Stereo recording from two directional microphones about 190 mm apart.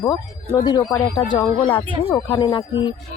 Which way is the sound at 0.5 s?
20° left (ahead or behind).